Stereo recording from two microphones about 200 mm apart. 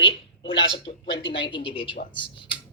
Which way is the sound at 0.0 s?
25° left (ahead or behind).